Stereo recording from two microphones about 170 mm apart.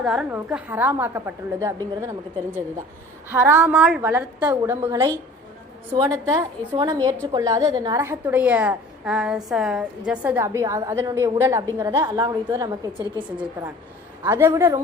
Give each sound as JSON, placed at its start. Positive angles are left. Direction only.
{"t": 0.0, "sound": "a woman's voice", "side_deg": -5}
{"t": 3.2, "sound": "a woman's voice", "side_deg": -10}
{"t": 4.9, "sound": "a woman's voice", "side_deg": -20}
{"t": 14.3, "sound": "a woman's voice", "side_deg": -15}